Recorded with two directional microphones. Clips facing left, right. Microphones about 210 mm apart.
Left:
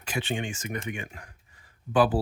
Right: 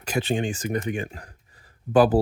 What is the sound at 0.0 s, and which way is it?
Speech, 40° right (ahead or behind).